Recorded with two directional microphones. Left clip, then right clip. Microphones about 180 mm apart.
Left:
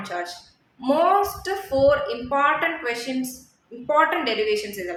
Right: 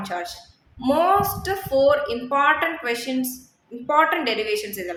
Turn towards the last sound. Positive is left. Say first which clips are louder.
# left 1 dB
turn(degrees=-30)  # may be behind; listen again after turning